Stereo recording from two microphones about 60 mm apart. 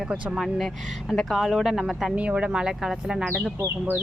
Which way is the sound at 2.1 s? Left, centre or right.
Right.